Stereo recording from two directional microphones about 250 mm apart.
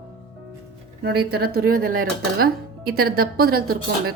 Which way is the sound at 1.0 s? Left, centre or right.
Right.